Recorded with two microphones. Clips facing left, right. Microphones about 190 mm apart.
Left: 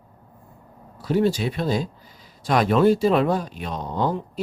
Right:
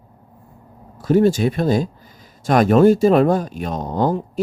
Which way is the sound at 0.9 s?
45° right (ahead or behind).